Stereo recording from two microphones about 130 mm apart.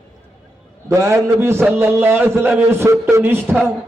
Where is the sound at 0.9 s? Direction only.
20° right (ahead or behind).